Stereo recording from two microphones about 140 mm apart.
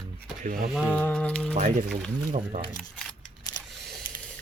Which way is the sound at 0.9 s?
10° left (ahead or behind).